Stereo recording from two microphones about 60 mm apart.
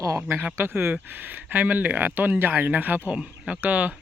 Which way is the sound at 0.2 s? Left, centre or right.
Right.